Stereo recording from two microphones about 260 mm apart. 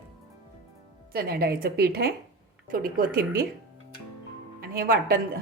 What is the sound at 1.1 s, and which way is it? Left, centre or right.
Speech, right.